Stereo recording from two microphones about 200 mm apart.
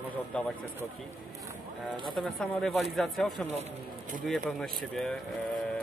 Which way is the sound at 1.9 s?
25° right (ahead or behind).